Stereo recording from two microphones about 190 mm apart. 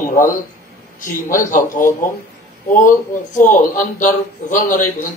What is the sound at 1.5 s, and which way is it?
A man's voice, 45° left (ahead or behind).